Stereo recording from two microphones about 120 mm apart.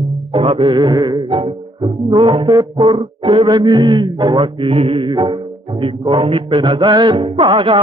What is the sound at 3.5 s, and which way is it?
Music, 35° right (ahead or behind).